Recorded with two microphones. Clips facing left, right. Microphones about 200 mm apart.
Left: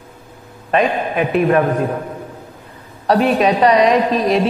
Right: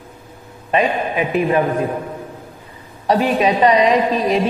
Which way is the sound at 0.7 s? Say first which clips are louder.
Left 1 dB; centre (ahead or behind).